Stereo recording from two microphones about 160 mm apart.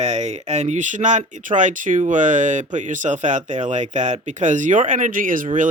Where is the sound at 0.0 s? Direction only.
45° right (ahead or behind).